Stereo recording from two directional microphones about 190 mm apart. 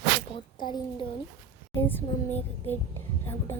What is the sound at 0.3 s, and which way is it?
Speech, 25° left (ahead or behind).